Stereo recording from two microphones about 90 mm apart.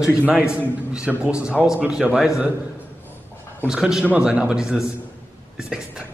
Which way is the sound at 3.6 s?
5° right (ahead or behind).